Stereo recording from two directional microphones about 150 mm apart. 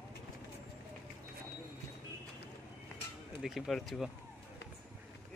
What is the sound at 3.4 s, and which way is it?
Speech, centre (ahead or behind).